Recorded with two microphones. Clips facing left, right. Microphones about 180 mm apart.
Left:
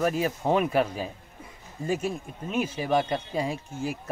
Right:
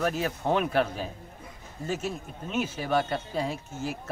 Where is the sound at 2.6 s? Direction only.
10° left (ahead or behind).